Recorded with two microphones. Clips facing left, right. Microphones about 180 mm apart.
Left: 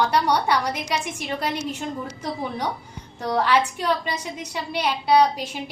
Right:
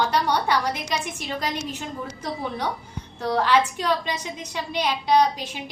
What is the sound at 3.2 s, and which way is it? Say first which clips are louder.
A woman's voice: even; 10° left (ahead or behind).